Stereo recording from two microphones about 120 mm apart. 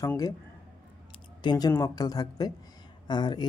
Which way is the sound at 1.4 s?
35° left (ahead or behind).